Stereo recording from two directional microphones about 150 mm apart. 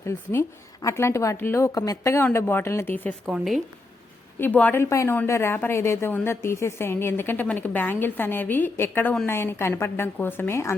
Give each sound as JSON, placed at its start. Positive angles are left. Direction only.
{"t": 0.0, "sound": "a woman's voice", "side_deg": 15}
{"t": 3.2, "sound": "a woman's voice", "side_deg": -5}
{"t": 4.4, "sound": "a woman's voice", "side_deg": 10}